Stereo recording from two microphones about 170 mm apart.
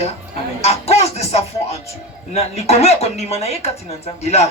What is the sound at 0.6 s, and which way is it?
Music, 40° left (ahead or behind).